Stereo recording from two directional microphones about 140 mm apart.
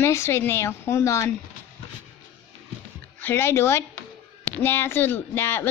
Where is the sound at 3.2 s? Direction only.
15° left (ahead or behind).